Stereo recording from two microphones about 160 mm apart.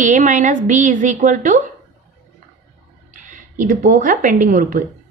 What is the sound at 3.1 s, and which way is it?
A woman's voice, 55° right (ahead or behind).